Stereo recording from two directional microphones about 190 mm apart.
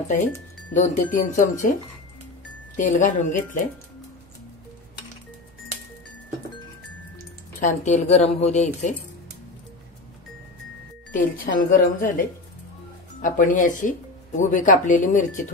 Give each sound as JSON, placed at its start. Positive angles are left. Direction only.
{"t": 0.7, "sound": "speech", "side_deg": 40}
{"t": 2.8, "sound": "a woman's voice", "side_deg": 40}
{"t": 7.6, "sound": "a woman's voice", "side_deg": 40}
{"t": 11.3, "sound": "speech", "side_deg": 50}
{"t": 13.2, "sound": "speech", "side_deg": 45}